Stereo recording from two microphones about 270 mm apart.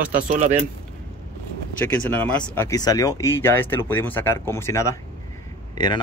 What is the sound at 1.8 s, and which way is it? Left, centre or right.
Speech, centre.